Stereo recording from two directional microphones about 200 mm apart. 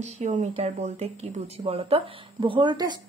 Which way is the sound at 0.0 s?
40° right (ahead or behind).